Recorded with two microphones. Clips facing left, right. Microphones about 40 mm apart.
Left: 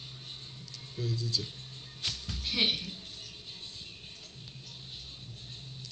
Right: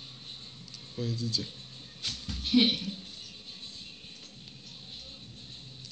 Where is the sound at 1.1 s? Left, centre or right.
Right.